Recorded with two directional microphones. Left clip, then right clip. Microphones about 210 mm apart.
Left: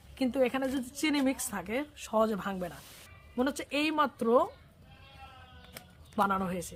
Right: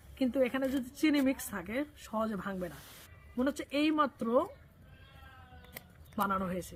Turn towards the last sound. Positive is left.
turn(degrees=20)  # may be behind; listen again after turning